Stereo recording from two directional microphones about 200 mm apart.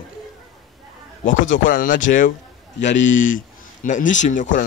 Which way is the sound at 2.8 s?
65° left (ahead or behind).